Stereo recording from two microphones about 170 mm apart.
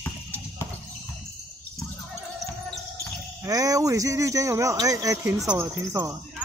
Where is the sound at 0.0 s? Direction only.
15° left (ahead or behind).